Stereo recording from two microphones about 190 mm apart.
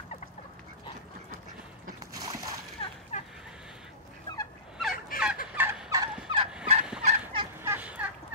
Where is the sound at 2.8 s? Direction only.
25° left (ahead or behind).